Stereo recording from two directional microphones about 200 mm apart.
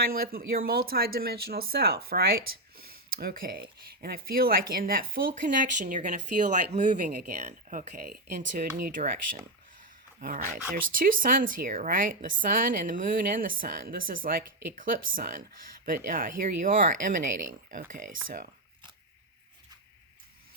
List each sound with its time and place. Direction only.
0.1 s speech: 50° right (ahead or behind)
10.2 s speech: 40° right (ahead or behind)